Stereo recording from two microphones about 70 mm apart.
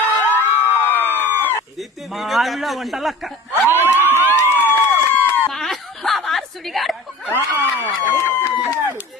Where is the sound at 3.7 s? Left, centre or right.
Right.